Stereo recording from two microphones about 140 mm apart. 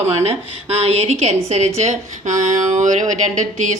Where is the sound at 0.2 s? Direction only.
45° right (ahead or behind).